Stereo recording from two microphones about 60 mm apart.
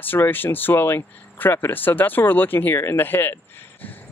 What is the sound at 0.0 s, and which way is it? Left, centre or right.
Speech, left.